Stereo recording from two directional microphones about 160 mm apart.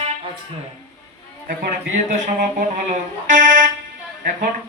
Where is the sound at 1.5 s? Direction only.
60° right (ahead or behind).